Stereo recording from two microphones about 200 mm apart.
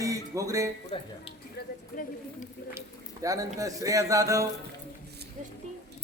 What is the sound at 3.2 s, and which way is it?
A man's voice, 15° right (ahead or behind).